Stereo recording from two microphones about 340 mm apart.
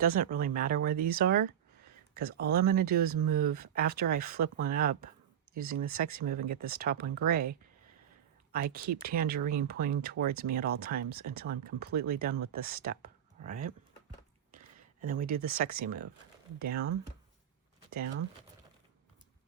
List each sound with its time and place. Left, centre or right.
0.3 s speech: right
8.5 s speech: right
14.8 s speech: right
16.6 s speech: right
17.9 s speech: right